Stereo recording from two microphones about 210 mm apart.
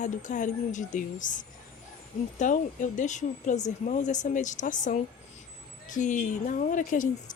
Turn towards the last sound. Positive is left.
turn(degrees=40)  # may be behind; listen again after turning